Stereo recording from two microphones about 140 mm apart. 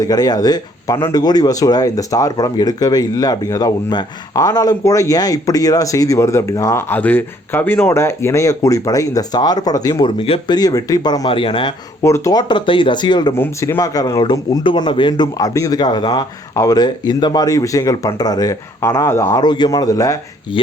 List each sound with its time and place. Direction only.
0.0 s speech: 25° left (ahead or behind)
12.0 s speech: 25° left (ahead or behind)
13.3 s speech: 20° left (ahead or behind)